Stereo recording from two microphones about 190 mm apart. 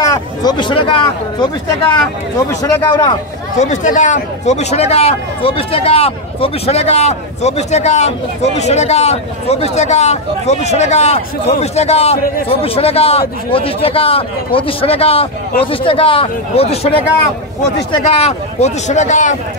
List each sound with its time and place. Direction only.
0.0 s speech: 20° left (ahead or behind)
3.5 s speech: 40° left (ahead or behind)
18.0 s speech: 35° left (ahead or behind)